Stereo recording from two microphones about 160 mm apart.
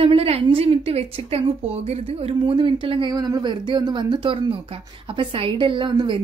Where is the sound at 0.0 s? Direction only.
35° right (ahead or behind).